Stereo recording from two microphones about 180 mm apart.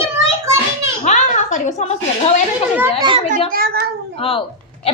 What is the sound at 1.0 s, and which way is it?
A woman's voice, 40° left (ahead or behind).